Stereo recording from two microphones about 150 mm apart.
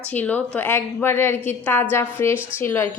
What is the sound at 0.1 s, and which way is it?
A woman's voice, 10° left (ahead or behind).